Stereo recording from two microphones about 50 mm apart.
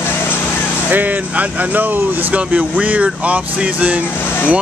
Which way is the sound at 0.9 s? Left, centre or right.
Right.